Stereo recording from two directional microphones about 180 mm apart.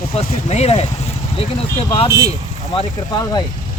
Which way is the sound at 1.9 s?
25° left (ahead or behind).